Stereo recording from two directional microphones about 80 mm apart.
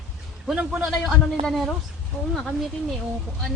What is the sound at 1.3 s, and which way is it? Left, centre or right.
Speech, centre.